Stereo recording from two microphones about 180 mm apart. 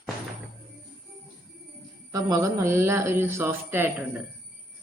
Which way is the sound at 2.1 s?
20° right (ahead or behind).